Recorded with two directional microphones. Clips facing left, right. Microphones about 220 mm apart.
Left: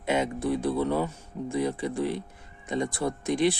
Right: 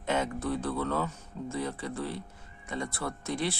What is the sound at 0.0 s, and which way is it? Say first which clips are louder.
Speech: left 4 dB; 10° left (ahead or behind).